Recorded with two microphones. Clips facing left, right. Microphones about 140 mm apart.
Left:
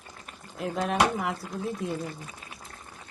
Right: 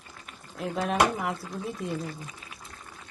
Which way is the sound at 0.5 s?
Centre (ahead or behind).